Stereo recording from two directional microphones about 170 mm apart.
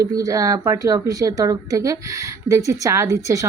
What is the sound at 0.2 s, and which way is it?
A woman's voice, 20° right (ahead or behind).